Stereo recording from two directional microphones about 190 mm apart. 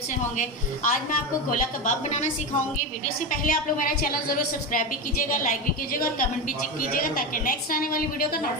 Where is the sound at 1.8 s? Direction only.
40° left (ahead or behind).